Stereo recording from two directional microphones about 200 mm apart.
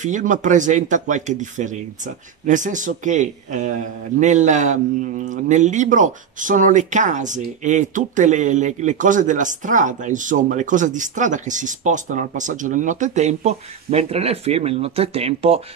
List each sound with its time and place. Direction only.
0.0 s speech: 40° right (ahead or behind)